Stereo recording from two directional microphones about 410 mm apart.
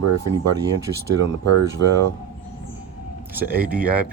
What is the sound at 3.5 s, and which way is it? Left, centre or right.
Speech, centre.